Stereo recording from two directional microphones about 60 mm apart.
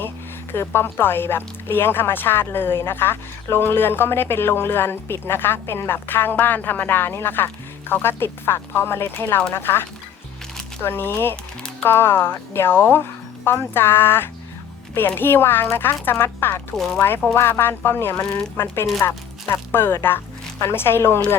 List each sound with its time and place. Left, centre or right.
0.5 s speech: left
10.8 s speech: left
16.7 s speech: centre
17.3 s speech: left
18.1 s speech: centre
18.5 s speech: left